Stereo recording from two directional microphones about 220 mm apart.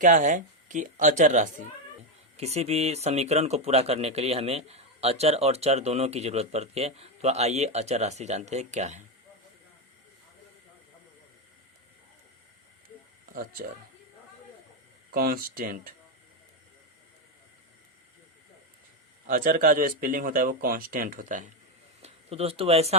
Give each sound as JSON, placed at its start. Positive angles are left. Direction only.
{"t": 0.0, "sound": "speech", "side_deg": -35}
{"t": 13.3, "sound": "speech", "side_deg": -40}
{"t": 15.1, "sound": "speech", "side_deg": -40}
{"t": 19.3, "sound": "speech", "side_deg": -40}